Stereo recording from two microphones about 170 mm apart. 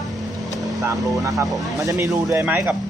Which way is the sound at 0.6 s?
Centre (ahead or behind).